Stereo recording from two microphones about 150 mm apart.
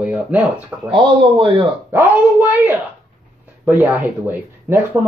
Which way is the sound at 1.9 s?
10° right (ahead or behind).